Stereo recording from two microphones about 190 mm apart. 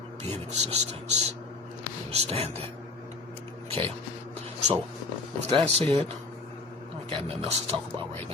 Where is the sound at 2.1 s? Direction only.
35° right (ahead or behind).